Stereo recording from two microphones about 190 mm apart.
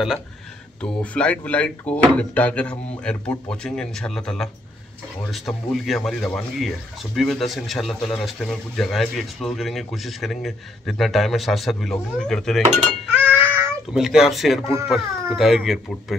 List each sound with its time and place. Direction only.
0.7 s speech: 5° left (ahead or behind)
5.5 s speech: centre (ahead or behind)
12.6 s speech: 40° right (ahead or behind)
13.0 s a sound: 10° right (ahead or behind)
15.3 s speech: centre (ahead or behind)